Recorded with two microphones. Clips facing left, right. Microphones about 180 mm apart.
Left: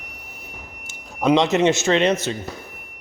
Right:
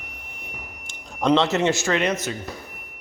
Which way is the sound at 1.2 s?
15° left (ahead or behind).